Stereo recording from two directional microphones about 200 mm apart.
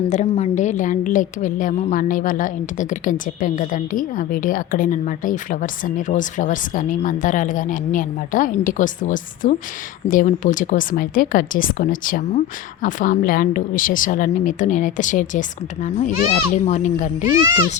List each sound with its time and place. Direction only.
0.1 s a woman's voice: 35° left (ahead or behind)